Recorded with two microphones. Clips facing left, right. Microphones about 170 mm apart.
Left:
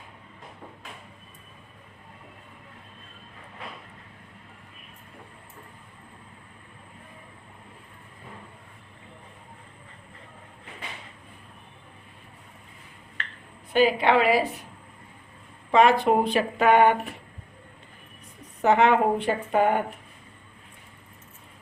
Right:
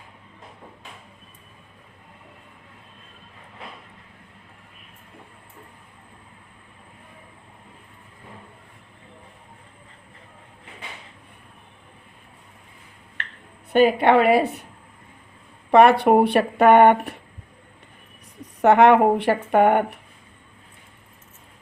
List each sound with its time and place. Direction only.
13.7 s speech: 55° right (ahead or behind)
15.7 s speech: 60° right (ahead or behind)
18.6 s a woman's voice: 70° right (ahead or behind)